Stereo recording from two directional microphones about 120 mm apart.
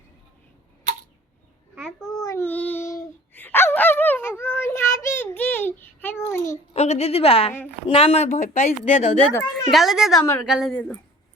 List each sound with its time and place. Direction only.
1.8 s babbling: 5° left (ahead or behind)
2.2 s child singing: 25° left (ahead or behind)
2.5 s a sound: 15° left (ahead or behind)
6.5 s a woman's voice: 70° left (ahead or behind); by 9.1 s 85° left
9.4 s speech: centre (ahead or behind)
10.7 s speech: 5° left (ahead or behind)